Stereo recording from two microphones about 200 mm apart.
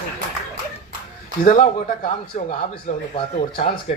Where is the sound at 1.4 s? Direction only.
35° left (ahead or behind).